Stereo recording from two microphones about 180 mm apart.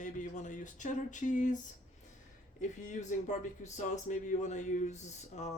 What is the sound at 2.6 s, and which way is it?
Speech, 40° left (ahead or behind).